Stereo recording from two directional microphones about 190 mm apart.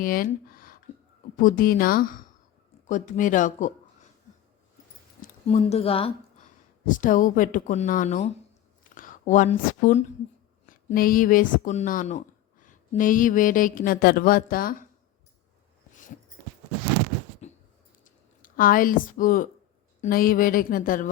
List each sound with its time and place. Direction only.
0.0 s speech: 50° left (ahead or behind)
5.5 s speech: 35° left (ahead or behind)
6.8 s speech: 45° left (ahead or behind)
8.8 s a sound: 45° left (ahead or behind)
10.8 s speech: 45° left (ahead or behind)
17.4 s a sound: 35° left (ahead or behind)
20.0 s speech: 50° left (ahead or behind)